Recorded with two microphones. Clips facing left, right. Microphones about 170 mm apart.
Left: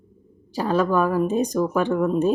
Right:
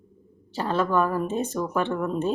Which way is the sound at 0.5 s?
15° left (ahead or behind).